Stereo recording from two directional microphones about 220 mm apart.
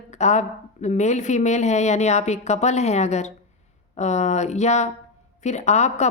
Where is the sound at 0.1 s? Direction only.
30° left (ahead or behind).